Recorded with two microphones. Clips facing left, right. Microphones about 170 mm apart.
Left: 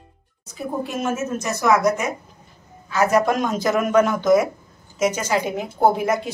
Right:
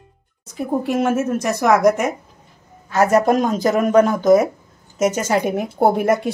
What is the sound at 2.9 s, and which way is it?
A woman's voice, 45° right (ahead or behind).